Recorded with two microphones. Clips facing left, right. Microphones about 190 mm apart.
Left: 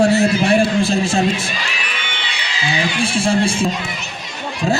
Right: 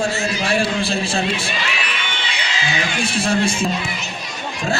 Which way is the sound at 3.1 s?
30° left (ahead or behind).